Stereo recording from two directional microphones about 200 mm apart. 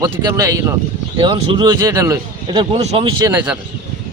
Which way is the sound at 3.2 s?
10° right (ahead or behind).